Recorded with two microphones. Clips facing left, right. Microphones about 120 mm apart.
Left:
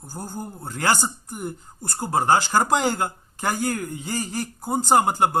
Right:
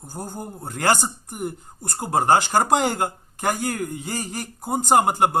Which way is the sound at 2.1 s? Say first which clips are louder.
Right 1 dB; 50° right (ahead or behind).